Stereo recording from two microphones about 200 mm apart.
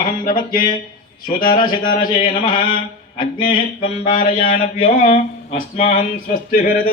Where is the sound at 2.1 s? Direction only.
45° left (ahead or behind).